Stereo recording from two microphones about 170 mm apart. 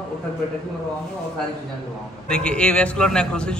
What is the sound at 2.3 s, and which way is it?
A man's voice, 5° left (ahead or behind).